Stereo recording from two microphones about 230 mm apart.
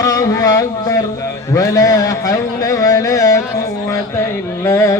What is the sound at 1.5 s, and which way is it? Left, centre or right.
Music, centre.